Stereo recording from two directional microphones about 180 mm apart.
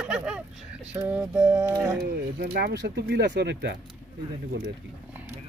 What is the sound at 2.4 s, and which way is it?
Speech, 65° right (ahead or behind).